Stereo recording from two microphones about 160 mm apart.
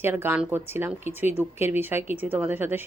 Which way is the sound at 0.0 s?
15° right (ahead or behind).